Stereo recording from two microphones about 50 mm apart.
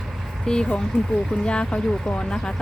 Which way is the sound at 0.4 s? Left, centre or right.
Centre.